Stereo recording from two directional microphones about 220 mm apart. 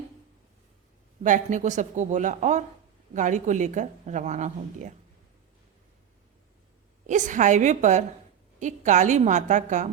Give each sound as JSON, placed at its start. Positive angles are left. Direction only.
{"t": 1.2, "sound": "a woman's voice", "side_deg": -35}
{"t": 7.1, "sound": "a woman's voice", "side_deg": -35}